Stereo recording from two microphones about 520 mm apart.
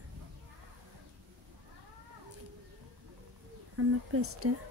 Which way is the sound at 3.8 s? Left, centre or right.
Right.